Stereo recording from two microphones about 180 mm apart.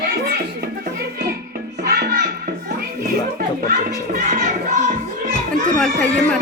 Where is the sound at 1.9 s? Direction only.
60° right (ahead or behind).